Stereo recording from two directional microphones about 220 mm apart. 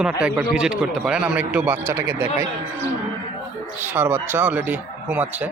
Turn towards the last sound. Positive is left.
turn(degrees=-5)  # may be behind; listen again after turning